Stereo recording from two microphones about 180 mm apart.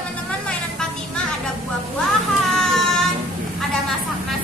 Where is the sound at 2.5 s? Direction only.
Centre (ahead or behind).